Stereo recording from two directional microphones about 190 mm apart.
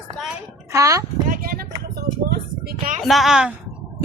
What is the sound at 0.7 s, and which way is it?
Speech, 15° right (ahead or behind).